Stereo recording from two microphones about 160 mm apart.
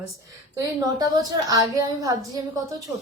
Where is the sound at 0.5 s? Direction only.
25° right (ahead or behind).